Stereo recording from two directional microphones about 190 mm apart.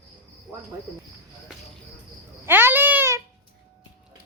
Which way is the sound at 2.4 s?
10° right (ahead or behind).